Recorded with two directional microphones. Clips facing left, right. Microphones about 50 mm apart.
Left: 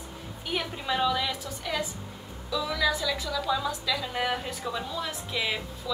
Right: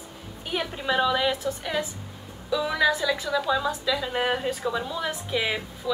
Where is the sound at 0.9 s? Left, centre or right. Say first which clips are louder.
Right 4 dB; right.